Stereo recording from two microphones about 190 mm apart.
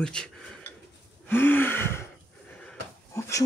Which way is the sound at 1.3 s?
10° left (ahead or behind).